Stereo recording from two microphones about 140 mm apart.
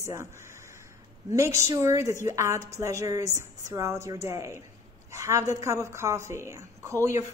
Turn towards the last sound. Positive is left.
turn(degrees=-20)  # may be behind; listen again after turning